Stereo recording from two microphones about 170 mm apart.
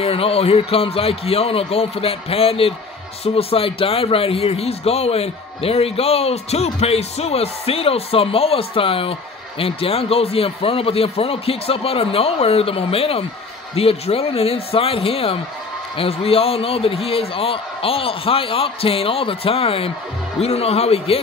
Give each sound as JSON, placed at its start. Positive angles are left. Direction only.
{"t": 0.0, "sound": "a man's voice", "side_deg": 35}